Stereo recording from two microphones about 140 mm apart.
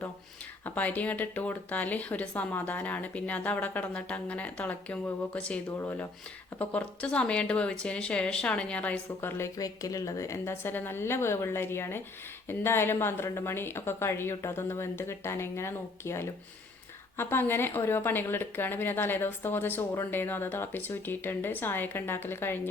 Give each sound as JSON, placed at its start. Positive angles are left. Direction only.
{"t": 0.6, "sound": "speech", "side_deg": 10}